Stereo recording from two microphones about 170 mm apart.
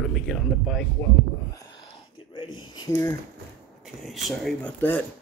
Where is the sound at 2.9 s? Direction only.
15° left (ahead or behind).